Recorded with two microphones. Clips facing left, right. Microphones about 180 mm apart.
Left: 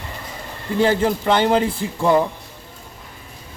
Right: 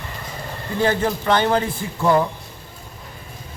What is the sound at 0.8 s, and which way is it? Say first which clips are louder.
A man's voice: left 2 dB; 25° left (ahead or behind).